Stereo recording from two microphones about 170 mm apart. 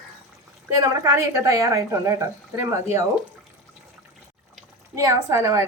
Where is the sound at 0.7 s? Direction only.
20° right (ahead or behind).